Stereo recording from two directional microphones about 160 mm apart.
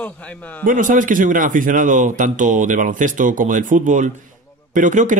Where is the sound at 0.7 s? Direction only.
55° right (ahead or behind).